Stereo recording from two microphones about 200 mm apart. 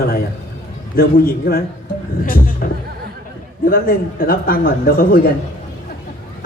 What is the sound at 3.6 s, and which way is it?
Speech, 45° left (ahead or behind).